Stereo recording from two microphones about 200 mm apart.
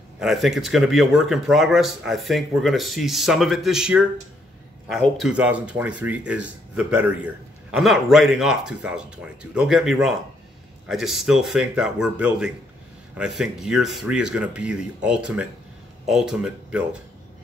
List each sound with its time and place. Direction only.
0.2 s speech: centre (ahead or behind)